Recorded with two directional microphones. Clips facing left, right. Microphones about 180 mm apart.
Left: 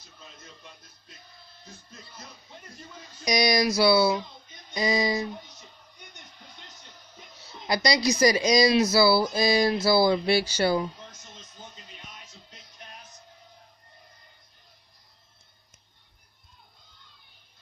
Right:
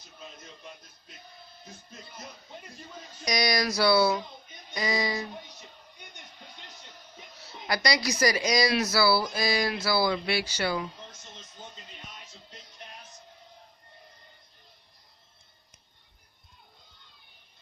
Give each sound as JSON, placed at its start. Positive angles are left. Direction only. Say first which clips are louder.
{"t": 3.3, "sound": "speech", "louder": "left 4 dB", "side_deg": 15}
{"t": 7.6, "sound": "speech", "louder": "left 4 dB", "side_deg": 20}